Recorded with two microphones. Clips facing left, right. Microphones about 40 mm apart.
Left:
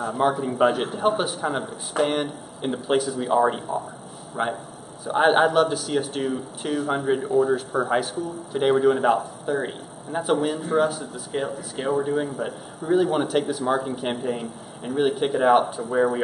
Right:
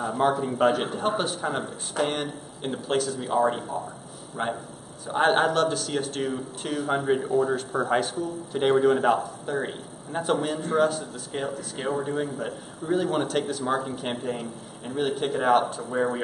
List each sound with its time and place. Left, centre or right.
0.0 s a man's voice: centre
4.4 s a man's voice: centre